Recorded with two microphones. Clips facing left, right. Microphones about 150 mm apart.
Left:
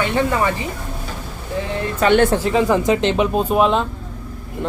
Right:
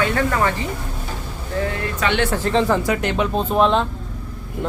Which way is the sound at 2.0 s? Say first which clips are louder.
Left 7 dB; 45° left (ahead or behind).